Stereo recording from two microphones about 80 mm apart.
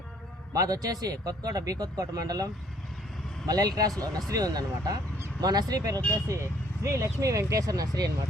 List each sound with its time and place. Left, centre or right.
0.5 s speech: right
6.2 s speech: right